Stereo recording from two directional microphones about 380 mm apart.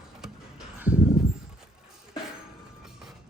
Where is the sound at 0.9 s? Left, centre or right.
Centre.